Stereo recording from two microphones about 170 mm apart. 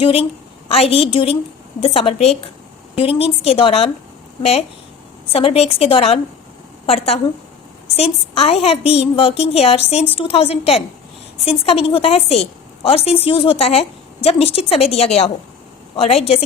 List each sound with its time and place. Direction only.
0.0 s a woman's voice: 35° left (ahead or behind)
5.3 s a woman's voice: 35° left (ahead or behind)